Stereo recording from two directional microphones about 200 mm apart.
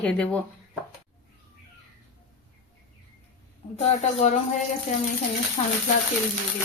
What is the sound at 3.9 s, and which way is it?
Speech, 35° left (ahead or behind).